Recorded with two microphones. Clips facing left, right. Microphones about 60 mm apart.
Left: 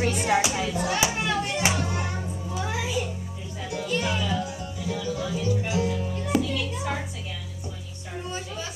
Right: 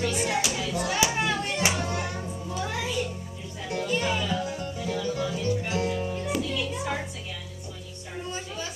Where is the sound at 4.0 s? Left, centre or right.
Centre.